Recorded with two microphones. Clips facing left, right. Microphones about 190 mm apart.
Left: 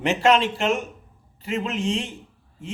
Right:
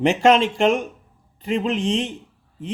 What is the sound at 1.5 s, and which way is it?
Speech, 35° right (ahead or behind).